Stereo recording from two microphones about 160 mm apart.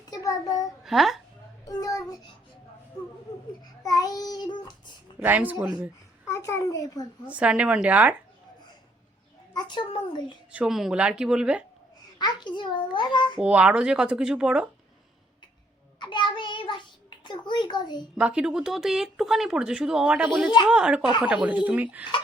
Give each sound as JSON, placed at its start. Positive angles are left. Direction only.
{"t": 0.0, "sound": "a sound", "side_deg": 20}
{"t": 0.9, "sound": "speech", "side_deg": 0}
{"t": 1.6, "sound": "child singing", "side_deg": 20}
{"t": 3.8, "sound": "child singing", "side_deg": 25}
{"t": 5.2, "sound": "speech", "side_deg": -10}
{"t": 6.2, "sound": "a sound", "side_deg": 20}
{"t": 7.3, "sound": "speech", "side_deg": -5}
{"t": 9.5, "sound": "a child's voice", "side_deg": 30}
{"t": 10.5, "sound": "speech", "side_deg": -5}
{"t": 12.2, "sound": "a child's voice", "side_deg": 30}
{"t": 13.4, "sound": "speech", "side_deg": -5}
{"t": 16.0, "sound": "child singing", "side_deg": 30}
{"t": 17.2, "sound": "a child's voice", "side_deg": 30}
{"t": 18.2, "sound": "speech", "side_deg": -5}